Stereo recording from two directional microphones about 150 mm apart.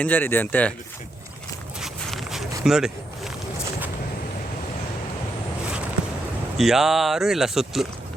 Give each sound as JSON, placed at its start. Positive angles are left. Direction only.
{"t": 0.0, "sound": "speech", "side_deg": 10}
{"t": 1.8, "sound": "walk", "side_deg": 0}
{"t": 2.6, "sound": "a sound", "side_deg": -5}
{"t": 6.6, "sound": "speech", "side_deg": 0}